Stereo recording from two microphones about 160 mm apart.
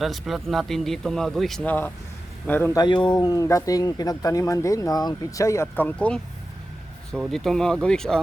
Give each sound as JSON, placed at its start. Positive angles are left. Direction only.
{"t": 0.0, "sound": "a man's voice", "side_deg": 0}
{"t": 2.7, "sound": "speech", "side_deg": 30}